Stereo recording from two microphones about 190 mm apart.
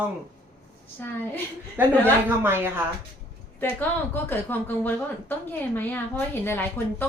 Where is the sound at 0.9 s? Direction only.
10° left (ahead or behind).